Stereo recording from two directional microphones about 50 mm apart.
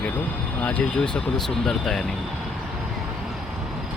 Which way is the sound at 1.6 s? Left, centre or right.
Centre.